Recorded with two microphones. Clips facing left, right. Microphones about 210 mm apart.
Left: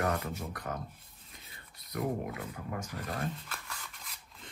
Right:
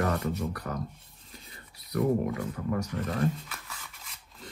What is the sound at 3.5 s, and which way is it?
Filing, centre (ahead or behind).